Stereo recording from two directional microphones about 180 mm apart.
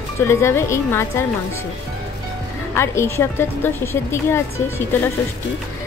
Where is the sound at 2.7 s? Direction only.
15° left (ahead or behind).